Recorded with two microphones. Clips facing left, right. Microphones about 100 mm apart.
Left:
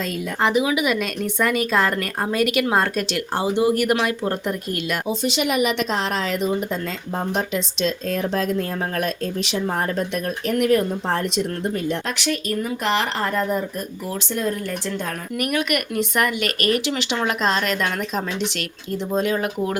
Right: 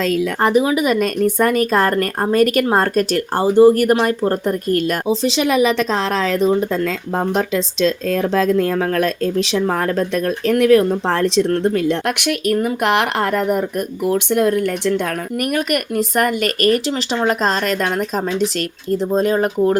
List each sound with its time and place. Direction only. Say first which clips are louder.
0.0 s speech: right 9 dB; 90° right
0.4 s speech: right 3 dB; 40° right (ahead or behind)
8.6 s speech: right 7 dB; 90° right; by 15.0 s 65° right (ahead or behind)
15.4 s speech: right 3 dB; 45° right (ahead or behind)